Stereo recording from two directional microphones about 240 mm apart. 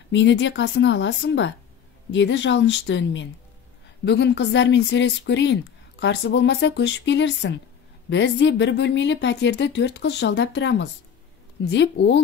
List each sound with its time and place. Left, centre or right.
0.1 s speech: left